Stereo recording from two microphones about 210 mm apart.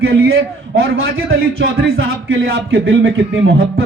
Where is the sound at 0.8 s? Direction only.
75° right (ahead or behind).